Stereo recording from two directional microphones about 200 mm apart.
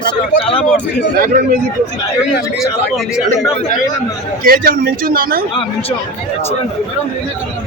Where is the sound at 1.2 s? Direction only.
45° right (ahead or behind).